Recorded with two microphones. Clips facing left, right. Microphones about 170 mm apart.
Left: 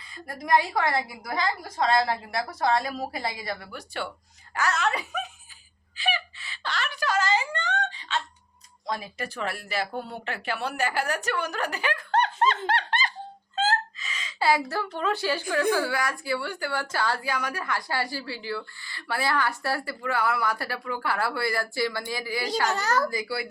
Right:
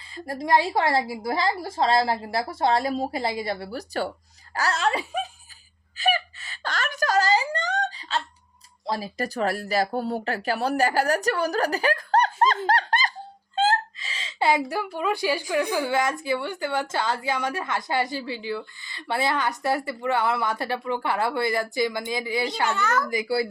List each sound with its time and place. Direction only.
0.1 s a woman's voice: 30° right (ahead or behind)
6.0 s whimper: 45° right (ahead or behind)
8.9 s speech: 35° right (ahead or behind)
13.6 s a sound: 30° right (ahead or behind); by 15.4 s 15° right (ahead or behind)
15.7 s a woman's voice: 20° right (ahead or behind)
22.6 s a child's voice: 35° left (ahead or behind)
23.0 s a woman's voice: 25° right (ahead or behind)